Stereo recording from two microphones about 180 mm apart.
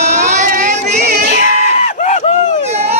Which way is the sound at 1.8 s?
40° left (ahead or behind).